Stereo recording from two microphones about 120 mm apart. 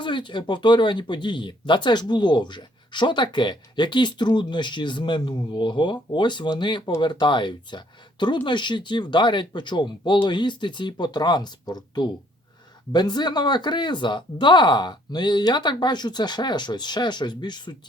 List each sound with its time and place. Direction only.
0.0 s speech: 40° left (ahead or behind)